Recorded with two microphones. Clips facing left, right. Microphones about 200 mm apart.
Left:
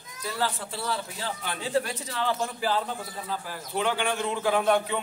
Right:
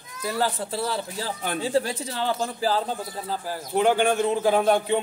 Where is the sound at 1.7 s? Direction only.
30° right (ahead or behind).